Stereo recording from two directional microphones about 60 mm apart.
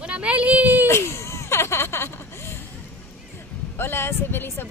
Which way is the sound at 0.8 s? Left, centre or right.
Left.